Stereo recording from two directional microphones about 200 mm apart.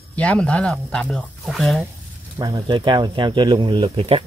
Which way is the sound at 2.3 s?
20° right (ahead or behind).